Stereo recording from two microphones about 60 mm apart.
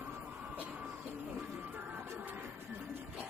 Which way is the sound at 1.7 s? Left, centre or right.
Right.